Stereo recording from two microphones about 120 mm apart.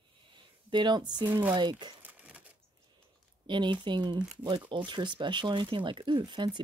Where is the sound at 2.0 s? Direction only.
15° right (ahead or behind).